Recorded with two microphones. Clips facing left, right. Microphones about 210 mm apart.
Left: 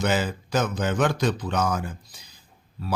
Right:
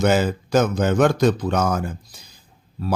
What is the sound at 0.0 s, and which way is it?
Speech, 45° right (ahead or behind).